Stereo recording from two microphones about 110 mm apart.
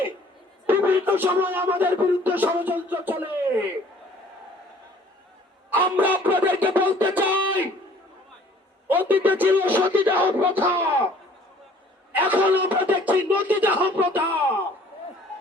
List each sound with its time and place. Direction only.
0.7 s music: 15° right (ahead or behind)
5.7 s music: 15° right (ahead or behind)
8.9 s music: 15° right (ahead or behind)
12.1 s music: 15° right (ahead or behind)